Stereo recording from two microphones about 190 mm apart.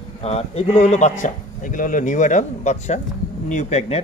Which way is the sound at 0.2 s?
35° left (ahead or behind).